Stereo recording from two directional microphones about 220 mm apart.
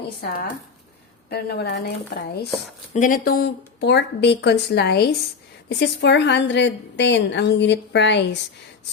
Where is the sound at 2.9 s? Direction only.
35° left (ahead or behind).